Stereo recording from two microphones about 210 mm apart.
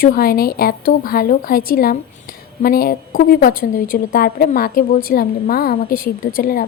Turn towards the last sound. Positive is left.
turn(degrees=45)  # may be behind; listen again after turning